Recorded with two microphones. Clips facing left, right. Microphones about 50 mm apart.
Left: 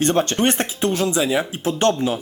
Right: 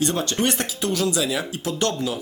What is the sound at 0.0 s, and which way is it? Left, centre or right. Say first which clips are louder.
Speech: left 4 dB; left.